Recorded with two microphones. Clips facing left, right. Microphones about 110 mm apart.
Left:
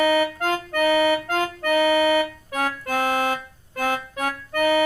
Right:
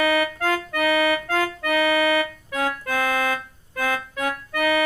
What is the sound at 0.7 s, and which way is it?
Accordion, 35° left (ahead or behind).